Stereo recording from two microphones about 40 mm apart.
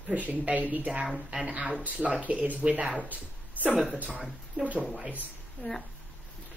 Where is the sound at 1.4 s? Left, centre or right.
Right.